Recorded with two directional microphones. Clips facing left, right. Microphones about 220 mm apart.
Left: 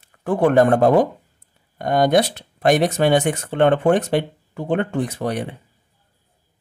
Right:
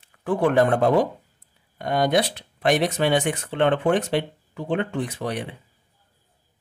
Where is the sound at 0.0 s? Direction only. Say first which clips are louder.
Left 4 dB; 45° left (ahead or behind).